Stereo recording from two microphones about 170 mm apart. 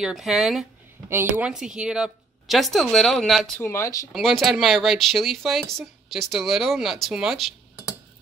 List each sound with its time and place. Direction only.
0.0 s speech: centre (ahead or behind)
3.6 s speech: 15° left (ahead or behind)
4.1 s speech: centre (ahead or behind)